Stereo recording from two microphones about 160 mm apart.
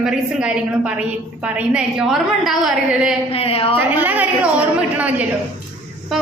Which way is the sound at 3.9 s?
10° right (ahead or behind).